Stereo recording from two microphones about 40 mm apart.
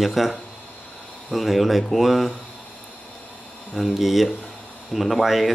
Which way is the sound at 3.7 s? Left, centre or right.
Centre.